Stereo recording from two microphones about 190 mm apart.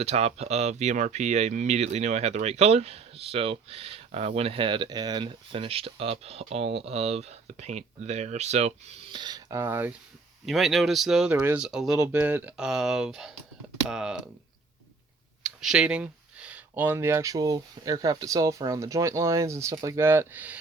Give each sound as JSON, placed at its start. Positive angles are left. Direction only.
{"t": 0.0, "sound": "speech", "side_deg": -35}
{"t": 9.2, "sound": "speech", "side_deg": -20}
{"t": 10.4, "sound": "speech", "side_deg": 0}
{"t": 15.4, "sound": "speech", "side_deg": -5}